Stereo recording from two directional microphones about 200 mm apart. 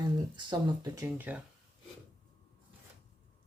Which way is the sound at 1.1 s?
10° right (ahead or behind).